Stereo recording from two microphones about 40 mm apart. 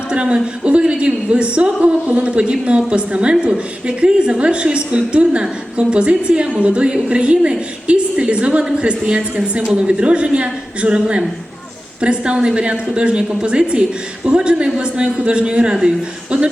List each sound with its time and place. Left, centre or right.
0.1 s a woman's voice: right